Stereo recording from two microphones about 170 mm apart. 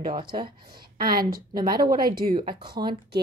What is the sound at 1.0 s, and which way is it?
Speech, 60° right (ahead or behind).